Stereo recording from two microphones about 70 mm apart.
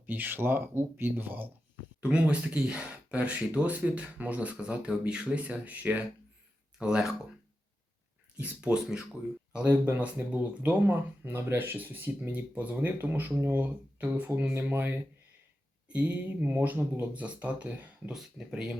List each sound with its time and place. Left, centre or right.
0.0 s speech: right
2.0 s speech: centre
8.4 s speech: centre
9.6 s speech: right
18.1 s speech: centre